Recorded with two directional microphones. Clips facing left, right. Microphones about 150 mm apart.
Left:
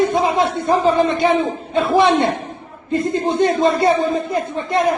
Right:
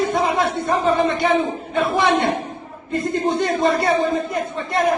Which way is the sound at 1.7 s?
25° left (ahead or behind).